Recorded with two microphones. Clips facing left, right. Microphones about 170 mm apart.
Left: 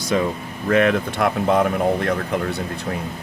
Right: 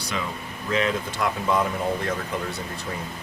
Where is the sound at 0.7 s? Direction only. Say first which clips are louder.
Left 7 dB; 60° left (ahead or behind).